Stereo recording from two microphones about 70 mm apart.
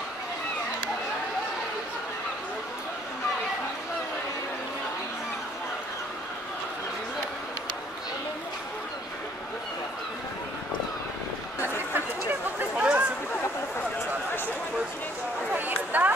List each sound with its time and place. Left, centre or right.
11.9 s chatter: right
12.7 s chatter: centre
15.5 s chatter: right